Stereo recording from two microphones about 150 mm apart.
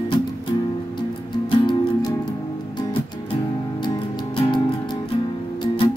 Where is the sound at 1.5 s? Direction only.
30° left (ahead or behind).